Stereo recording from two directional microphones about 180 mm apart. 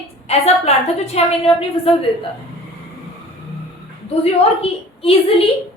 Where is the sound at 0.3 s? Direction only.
35° left (ahead or behind).